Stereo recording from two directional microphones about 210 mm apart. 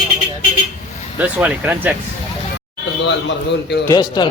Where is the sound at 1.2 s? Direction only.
5° right (ahead or behind).